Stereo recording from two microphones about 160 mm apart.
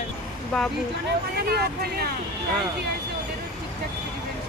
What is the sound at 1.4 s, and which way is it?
Speech, 80° right.